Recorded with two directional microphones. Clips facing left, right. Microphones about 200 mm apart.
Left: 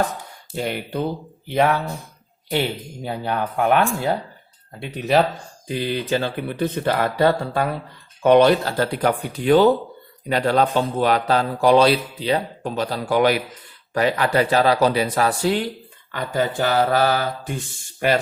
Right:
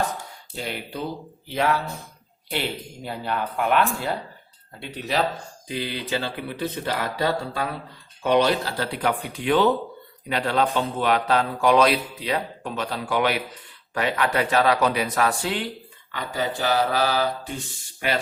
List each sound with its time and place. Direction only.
0.5 s speech: 55° left (ahead or behind)
5.6 s speech: 50° left (ahead or behind)
16.1 s speech: 50° left (ahead or behind)